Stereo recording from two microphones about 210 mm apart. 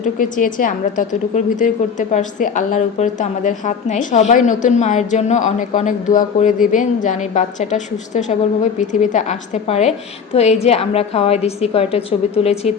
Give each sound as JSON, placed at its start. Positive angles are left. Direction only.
{"t": 0.0, "sound": "a woman's voice", "side_deg": 40}